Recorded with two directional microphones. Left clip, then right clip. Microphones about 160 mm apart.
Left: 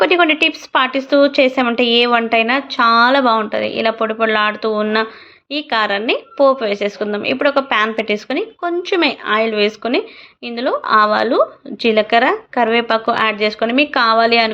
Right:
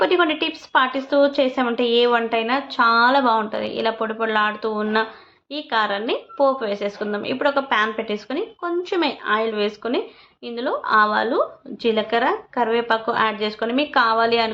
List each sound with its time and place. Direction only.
0.0 s a woman's voice: 15° left (ahead or behind)